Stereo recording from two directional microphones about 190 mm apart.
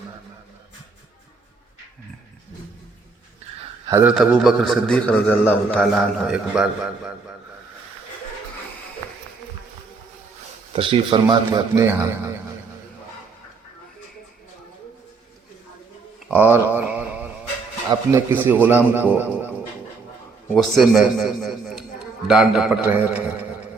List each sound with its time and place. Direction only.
4.0 s a man's voice: centre (ahead or behind)
10.7 s speech: 25° right (ahead or behind)
16.3 s speech: 10° right (ahead or behind)
20.5 s a man's voice: centre (ahead or behind)